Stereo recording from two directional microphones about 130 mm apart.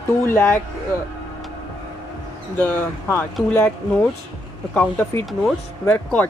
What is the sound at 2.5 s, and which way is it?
A woman's voice, 15° left (ahead or behind).